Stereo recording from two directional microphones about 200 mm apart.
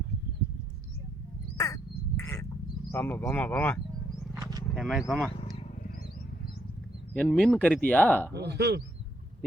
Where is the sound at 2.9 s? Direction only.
10° left (ahead or behind).